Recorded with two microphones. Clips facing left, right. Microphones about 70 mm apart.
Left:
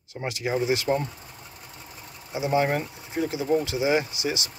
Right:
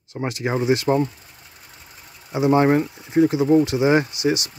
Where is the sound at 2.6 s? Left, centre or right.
Right.